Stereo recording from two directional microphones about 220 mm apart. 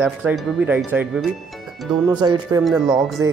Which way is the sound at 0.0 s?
5° right (ahead or behind).